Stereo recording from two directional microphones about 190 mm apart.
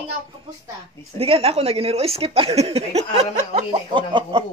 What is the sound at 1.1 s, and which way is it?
A woman's voice, 30° right (ahead or behind).